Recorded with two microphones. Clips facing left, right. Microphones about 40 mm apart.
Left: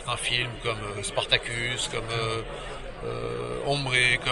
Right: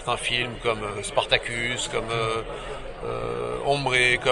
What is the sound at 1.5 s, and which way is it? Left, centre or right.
Speech, right.